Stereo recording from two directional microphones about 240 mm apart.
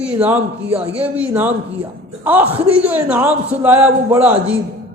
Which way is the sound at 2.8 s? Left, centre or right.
Centre.